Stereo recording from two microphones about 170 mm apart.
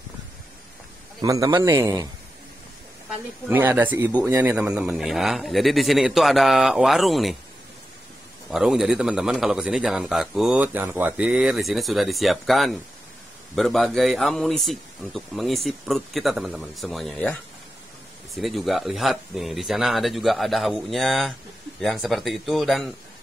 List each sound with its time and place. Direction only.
1.2 s a man's voice: 20° right (ahead or behind)
3.4 s speech: 10° right (ahead or behind)
8.5 s speech: centre (ahead or behind)